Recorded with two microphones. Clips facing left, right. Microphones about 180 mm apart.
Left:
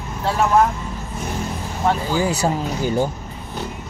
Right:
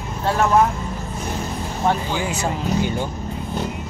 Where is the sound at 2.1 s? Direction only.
35° left (ahead or behind).